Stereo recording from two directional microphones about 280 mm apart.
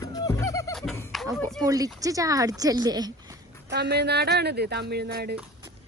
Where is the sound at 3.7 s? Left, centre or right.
Right.